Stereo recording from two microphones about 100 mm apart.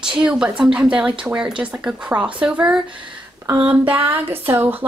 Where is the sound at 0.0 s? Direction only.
10° right (ahead or behind).